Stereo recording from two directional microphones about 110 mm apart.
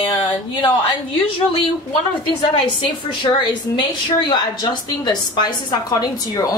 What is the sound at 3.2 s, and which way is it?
A woman's voice, 45° left (ahead or behind).